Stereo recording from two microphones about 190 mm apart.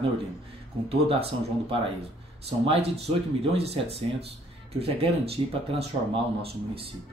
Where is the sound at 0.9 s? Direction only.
30° right (ahead or behind).